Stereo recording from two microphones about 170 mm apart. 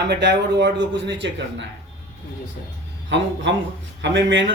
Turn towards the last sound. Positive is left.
turn(degrees=-90)